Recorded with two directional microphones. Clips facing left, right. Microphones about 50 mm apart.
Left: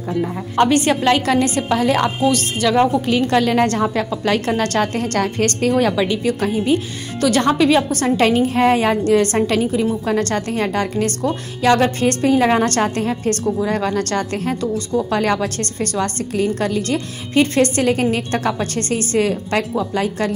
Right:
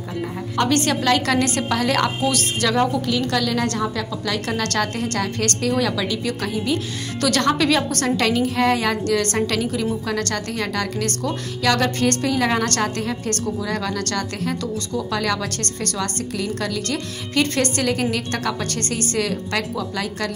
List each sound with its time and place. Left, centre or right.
0.6 s a woman's voice: left
7.2 s a woman's voice: centre
8.2 s a woman's voice: left